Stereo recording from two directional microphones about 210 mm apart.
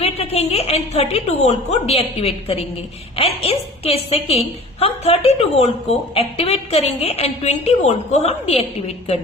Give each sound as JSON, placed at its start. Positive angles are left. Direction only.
{"t": 0.0, "sound": "a woman's voice", "side_deg": 30}